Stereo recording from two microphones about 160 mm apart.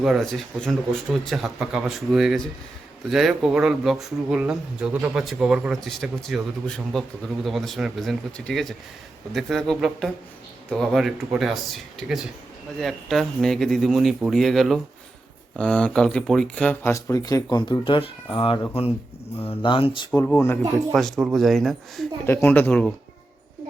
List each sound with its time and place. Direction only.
0.0 s speech: centre (ahead or behind)
16.9 s speech: 20° left (ahead or behind)
20.1 s speech: 15° left (ahead or behind)
20.9 s speech: centre (ahead or behind)
22.3 s speech: 10° left (ahead or behind)